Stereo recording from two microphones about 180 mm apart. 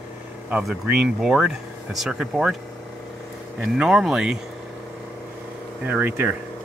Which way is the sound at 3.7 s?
Centre (ahead or behind).